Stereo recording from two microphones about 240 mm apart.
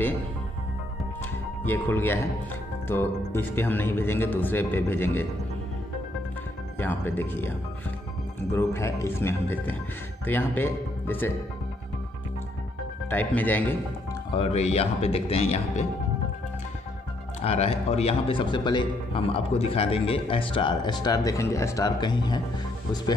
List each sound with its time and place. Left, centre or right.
1.6 s speech: centre
6.8 s speech: centre
13.1 s speech: centre
14.3 s a man's voice: left
17.4 s a man's voice: left